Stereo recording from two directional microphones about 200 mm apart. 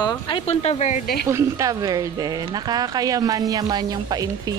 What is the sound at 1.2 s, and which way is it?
A woman's voice, 15° right (ahead or behind).